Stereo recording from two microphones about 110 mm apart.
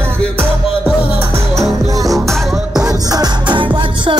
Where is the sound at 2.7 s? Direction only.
35° right (ahead or behind).